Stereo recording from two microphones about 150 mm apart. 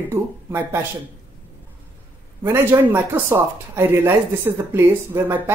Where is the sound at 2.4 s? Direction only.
15° right (ahead or behind).